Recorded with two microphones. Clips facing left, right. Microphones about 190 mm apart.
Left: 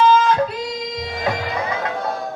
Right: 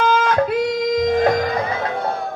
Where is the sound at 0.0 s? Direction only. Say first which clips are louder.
Left 2 dB; 55° right (ahead or behind).